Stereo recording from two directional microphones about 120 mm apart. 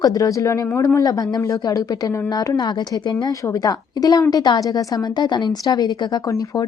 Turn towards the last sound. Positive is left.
turn(degrees=30)  # may be behind; listen again after turning